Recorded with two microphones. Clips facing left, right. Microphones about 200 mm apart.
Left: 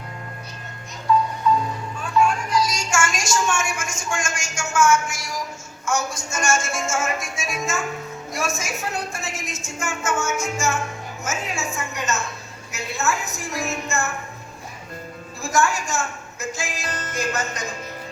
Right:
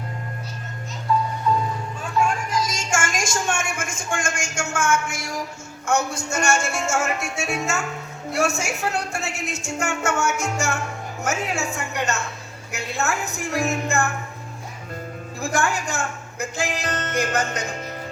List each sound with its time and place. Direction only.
2.2 s music: 50° right (ahead or behind)
5.8 s a woman's voice: 60° right (ahead or behind)
15.4 s a woman's voice: 60° right (ahead or behind)